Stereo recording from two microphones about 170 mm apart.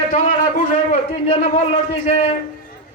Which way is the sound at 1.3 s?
35° left (ahead or behind).